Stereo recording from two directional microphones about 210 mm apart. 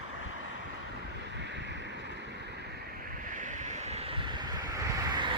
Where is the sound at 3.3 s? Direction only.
35° right (ahead or behind).